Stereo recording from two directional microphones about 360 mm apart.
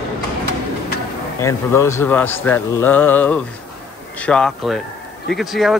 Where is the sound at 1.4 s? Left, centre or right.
Centre.